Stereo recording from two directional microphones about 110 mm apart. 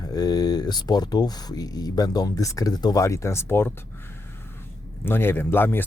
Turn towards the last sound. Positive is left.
turn(degrees=20)  # may be behind; listen again after turning